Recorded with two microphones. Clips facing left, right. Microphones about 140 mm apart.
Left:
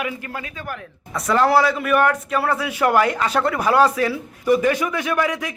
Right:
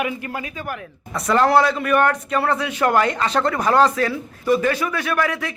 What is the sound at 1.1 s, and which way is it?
A man's voice, centre (ahead or behind).